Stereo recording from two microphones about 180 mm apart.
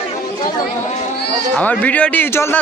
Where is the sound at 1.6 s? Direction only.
10° left (ahead or behind).